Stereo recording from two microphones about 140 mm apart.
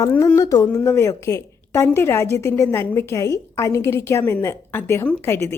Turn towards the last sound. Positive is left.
turn(degrees=20)  # may be behind; listen again after turning